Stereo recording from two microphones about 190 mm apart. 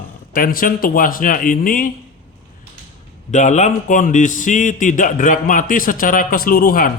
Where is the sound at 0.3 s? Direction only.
45° left (ahead or behind).